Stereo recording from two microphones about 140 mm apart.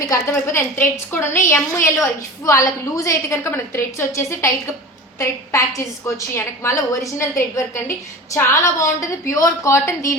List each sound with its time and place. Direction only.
0.1 s a woman's voice: 20° left (ahead or behind)